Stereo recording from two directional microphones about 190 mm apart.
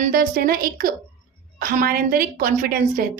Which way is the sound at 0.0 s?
50° right (ahead or behind).